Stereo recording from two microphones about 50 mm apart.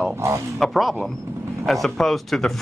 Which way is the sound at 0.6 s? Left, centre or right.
Centre.